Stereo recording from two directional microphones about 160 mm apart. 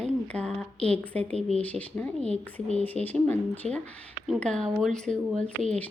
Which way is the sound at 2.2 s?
40° left (ahead or behind).